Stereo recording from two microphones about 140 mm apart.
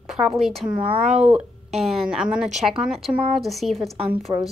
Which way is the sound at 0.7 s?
10° right (ahead or behind).